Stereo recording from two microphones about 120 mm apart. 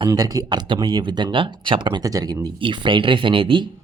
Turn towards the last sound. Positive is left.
turn(degrees=-45)  # may be behind; listen again after turning